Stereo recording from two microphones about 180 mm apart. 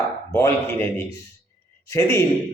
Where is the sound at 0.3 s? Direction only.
15° left (ahead or behind).